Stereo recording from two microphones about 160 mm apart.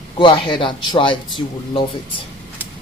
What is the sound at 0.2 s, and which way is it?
Speech, 30° left (ahead or behind).